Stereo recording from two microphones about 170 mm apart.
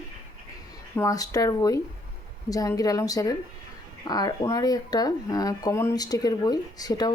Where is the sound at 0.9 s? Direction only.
20° left (ahead or behind).